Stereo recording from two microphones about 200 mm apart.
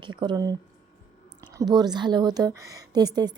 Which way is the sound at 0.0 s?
25° right (ahead or behind).